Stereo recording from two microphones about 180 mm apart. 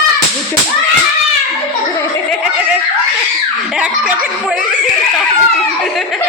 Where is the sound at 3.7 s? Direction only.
5° right (ahead or behind).